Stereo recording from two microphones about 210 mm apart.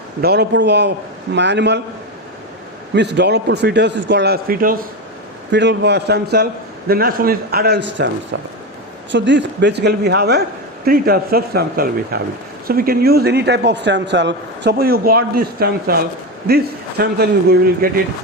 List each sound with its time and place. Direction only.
0.2 s a man's voice: 50° right (ahead or behind)
2.9 s a man's voice: 55° right (ahead or behind)
5.5 s a man's voice: 55° right (ahead or behind)
9.1 s a man's voice: 60° right (ahead or behind)